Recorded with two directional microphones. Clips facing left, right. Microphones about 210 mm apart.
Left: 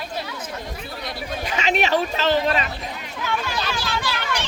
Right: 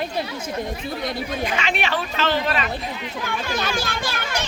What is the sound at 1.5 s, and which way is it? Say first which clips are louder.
Speech: left 7 dB; 40° left (ahead or behind).